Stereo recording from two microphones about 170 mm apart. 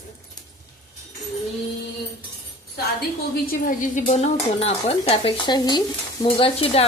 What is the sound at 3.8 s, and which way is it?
Speech, 45° left (ahead or behind).